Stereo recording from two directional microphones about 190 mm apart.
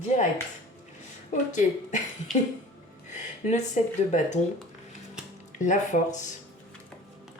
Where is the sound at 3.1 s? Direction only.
40° left (ahead or behind).